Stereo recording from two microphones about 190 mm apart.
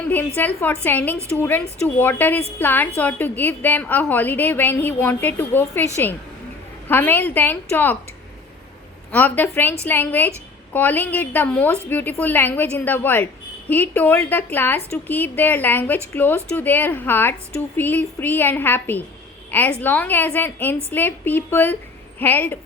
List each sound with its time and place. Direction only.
0.3 s speech: 10° left (ahead or behind)
6.8 s speech: 10° left (ahead or behind)
9.1 s a woman's voice: 10° left (ahead or behind)